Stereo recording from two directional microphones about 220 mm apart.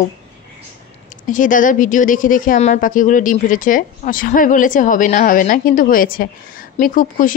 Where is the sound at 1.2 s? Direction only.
35° left (ahead or behind).